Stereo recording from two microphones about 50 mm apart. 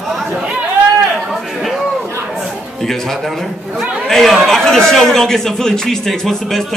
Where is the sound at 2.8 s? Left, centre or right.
Centre.